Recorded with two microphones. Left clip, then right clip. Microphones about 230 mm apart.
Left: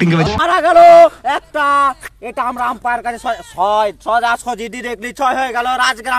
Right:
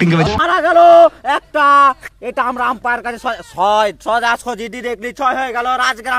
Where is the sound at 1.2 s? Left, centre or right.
Right.